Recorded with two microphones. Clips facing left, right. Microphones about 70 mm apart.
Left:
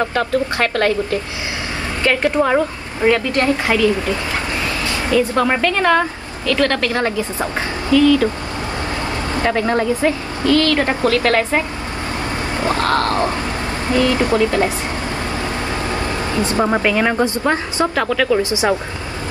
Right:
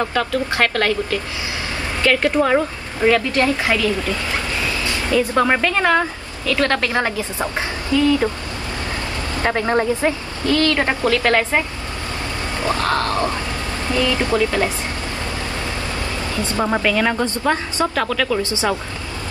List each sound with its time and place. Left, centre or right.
0.1 s a woman's voice: left
2.0 s speech: left
5.1 s a woman's voice: right
5.5 s a woman's voice: centre
6.6 s a woman's voice: right
9.5 s a woman's voice: centre
12.5 s vehicle: left
12.9 s a woman's voice: left
16.6 s a woman's voice: centre